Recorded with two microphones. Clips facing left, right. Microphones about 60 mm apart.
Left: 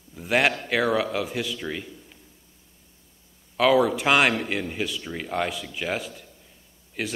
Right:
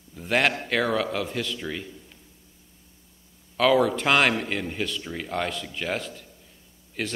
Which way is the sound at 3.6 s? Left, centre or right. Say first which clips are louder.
Left 1 dB; centre.